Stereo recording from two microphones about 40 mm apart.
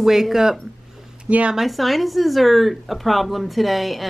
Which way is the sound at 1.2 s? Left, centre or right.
Right.